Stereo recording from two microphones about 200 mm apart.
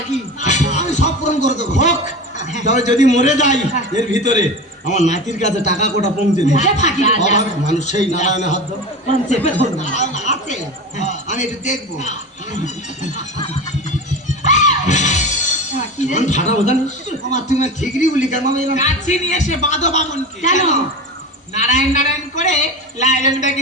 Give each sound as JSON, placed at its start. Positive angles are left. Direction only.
{"t": 0.1, "sound": "music", "side_deg": 35}
{"t": 1.5, "sound": "a man's voice", "side_deg": 35}
{"t": 14.1, "sound": "music", "side_deg": 35}
{"t": 15.8, "sound": "a man's voice", "side_deg": 35}